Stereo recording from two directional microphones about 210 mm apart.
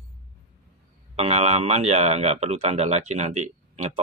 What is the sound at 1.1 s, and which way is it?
Speech, 30° right (ahead or behind).